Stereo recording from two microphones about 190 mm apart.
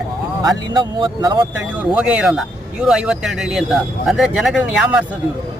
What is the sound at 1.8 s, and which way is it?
Speech, 5° right (ahead or behind).